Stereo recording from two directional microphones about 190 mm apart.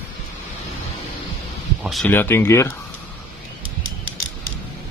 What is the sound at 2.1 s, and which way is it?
Speech, 10° left (ahead or behind).